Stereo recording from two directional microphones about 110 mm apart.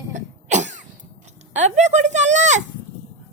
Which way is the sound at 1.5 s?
90° right.